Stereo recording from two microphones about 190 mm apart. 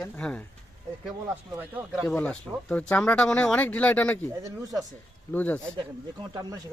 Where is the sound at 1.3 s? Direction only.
10° right (ahead or behind); by 4.2 s 10° left (ahead or behind).